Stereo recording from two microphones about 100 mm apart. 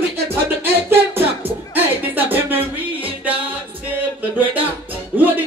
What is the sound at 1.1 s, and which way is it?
Music, 20° right (ahead or behind).